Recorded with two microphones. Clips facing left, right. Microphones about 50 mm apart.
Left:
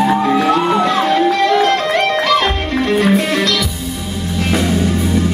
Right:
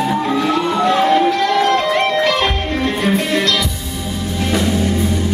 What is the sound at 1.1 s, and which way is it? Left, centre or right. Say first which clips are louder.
Music: left 1 dB; left.